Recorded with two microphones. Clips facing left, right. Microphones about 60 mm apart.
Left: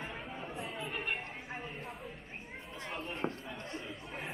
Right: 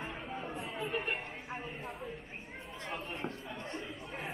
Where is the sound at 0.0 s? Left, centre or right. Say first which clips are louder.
Right 2 dB; centre.